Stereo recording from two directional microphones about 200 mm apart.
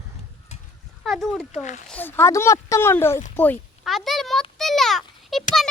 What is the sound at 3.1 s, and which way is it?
Speech, 40° left (ahead or behind).